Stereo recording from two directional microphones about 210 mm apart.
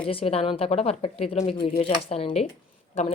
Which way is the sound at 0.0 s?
25° left (ahead or behind).